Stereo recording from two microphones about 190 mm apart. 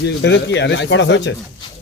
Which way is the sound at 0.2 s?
70° left (ahead or behind).